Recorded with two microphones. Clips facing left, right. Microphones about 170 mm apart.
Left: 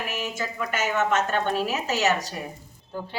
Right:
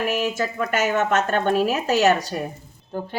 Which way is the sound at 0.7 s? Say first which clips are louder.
Right 3 dB; 45° right (ahead or behind).